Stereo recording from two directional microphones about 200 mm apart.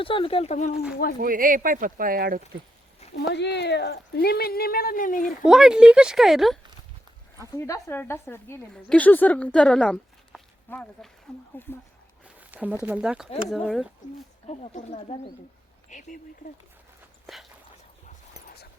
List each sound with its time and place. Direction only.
0.0 s speech: 25° left (ahead or behind)
1.2 s speech: 45° right (ahead or behind)
3.0 s a sound: 30° left (ahead or behind)
3.3 s speech: 60° left (ahead or behind); by 5.3 s 45° left (ahead or behind)
5.4 s speech: 5° right (ahead or behind)
7.5 s a woman's voice: 15° left (ahead or behind)
12.2 s speech: 5° right (ahead or behind)
14.4 s speech: 35° left (ahead or behind)